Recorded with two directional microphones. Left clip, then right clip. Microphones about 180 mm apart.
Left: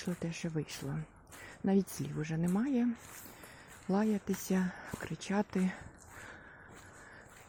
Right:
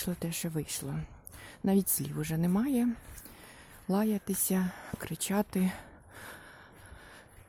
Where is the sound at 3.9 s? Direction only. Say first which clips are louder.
Right 2 dB; 15° right (ahead or behind).